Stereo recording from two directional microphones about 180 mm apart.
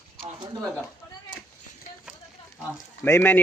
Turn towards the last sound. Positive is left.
turn(degrees=10)  # may be behind; listen again after turning